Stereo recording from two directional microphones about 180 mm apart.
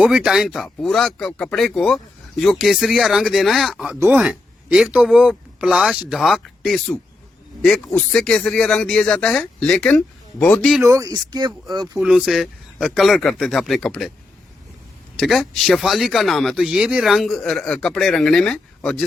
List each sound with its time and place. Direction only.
0.0 s speech: 5° right (ahead or behind)
10.8 s speech: 20° right (ahead or behind)
11.9 s speech: 5° right (ahead or behind)
15.1 s speech: centre (ahead or behind)